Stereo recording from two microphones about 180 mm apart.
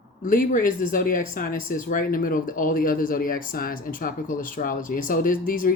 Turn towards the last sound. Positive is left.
turn(degrees=50)  # may be behind; listen again after turning